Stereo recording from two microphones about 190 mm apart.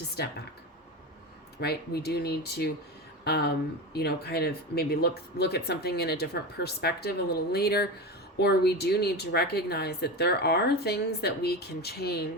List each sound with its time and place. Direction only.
0.2 s speech: 60° left (ahead or behind)
1.6 s speech: 55° left (ahead or behind)